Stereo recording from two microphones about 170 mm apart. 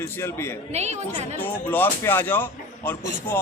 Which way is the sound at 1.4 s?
10° left (ahead or behind).